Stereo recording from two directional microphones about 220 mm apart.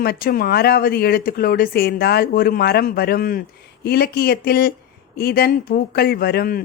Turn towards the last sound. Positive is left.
turn(degrees=45)  # may be behind; listen again after turning